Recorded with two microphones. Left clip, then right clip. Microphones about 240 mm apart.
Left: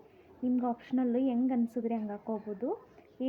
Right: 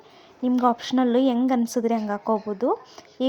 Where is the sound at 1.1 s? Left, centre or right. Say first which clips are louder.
Right 11 dB; right.